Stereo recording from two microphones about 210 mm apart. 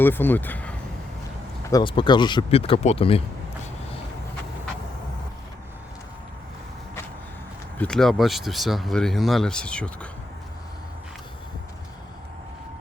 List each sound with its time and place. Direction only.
0.0 s speech: 10° left (ahead or behind)
1.7 s speech: 25° left (ahead or behind)
7.8 s speech: 5° left (ahead or behind)